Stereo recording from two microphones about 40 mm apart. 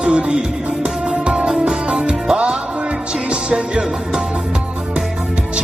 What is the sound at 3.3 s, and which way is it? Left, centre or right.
Music, right.